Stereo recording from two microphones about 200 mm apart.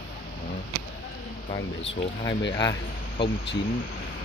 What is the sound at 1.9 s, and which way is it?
Speech, 30° left (ahead or behind).